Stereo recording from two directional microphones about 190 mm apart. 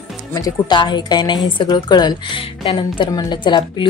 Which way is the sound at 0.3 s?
20° left (ahead or behind).